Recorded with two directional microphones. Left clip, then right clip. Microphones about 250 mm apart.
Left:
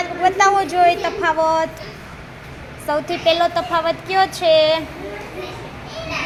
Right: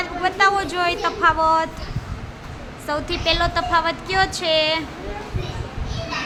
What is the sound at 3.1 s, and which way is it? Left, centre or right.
Speech, centre.